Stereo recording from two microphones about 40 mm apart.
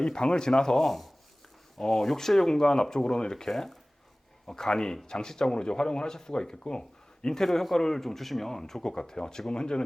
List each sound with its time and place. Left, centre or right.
0.0 s speech: centre
0.9 s speech: centre
1.8 s speech: centre
3.5 s speech: centre; by 7.4 s left
7.4 s speech: centre